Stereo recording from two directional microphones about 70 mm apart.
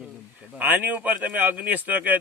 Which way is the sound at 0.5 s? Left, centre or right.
Right.